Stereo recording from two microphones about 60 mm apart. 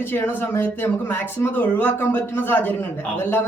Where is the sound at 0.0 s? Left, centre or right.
Left.